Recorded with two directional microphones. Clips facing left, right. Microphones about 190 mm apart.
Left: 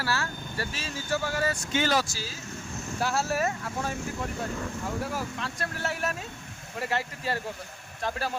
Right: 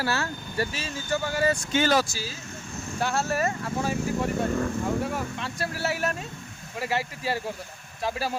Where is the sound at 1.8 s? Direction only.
50° right (ahead or behind).